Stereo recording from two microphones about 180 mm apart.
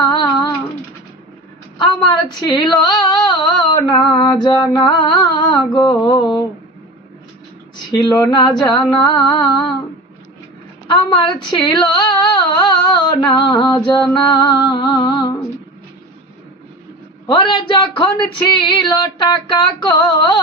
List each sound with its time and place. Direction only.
1.8 s speech: 25° left (ahead or behind)
7.9 s speech: 20° left (ahead or behind)
10.8 s a sound: 25° left (ahead or behind)
14.3 s speech: 25° left (ahead or behind)
17.2 s speech: 25° left (ahead or behind)